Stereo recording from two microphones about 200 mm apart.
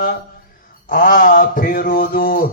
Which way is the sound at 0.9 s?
45° left (ahead or behind).